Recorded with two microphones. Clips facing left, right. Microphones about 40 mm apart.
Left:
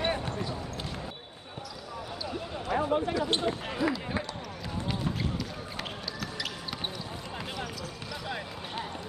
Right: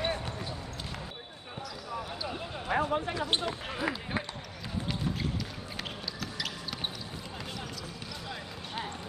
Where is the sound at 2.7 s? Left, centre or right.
Right.